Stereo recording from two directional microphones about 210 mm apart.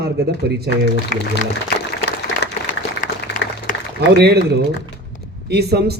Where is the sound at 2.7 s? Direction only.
40° left (ahead or behind).